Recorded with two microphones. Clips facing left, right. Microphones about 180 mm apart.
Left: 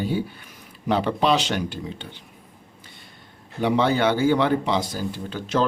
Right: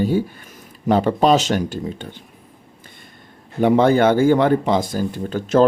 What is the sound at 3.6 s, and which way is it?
Speech, 50° right (ahead or behind).